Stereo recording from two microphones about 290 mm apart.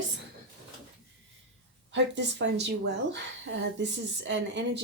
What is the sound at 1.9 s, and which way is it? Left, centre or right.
A woman's voice, right.